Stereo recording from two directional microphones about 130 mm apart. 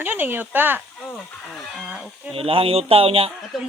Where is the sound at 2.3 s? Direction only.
45° right (ahead or behind).